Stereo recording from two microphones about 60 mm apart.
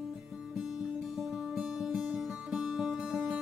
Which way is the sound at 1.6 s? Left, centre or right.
Centre.